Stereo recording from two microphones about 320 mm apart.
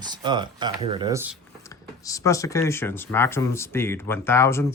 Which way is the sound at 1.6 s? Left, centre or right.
Centre.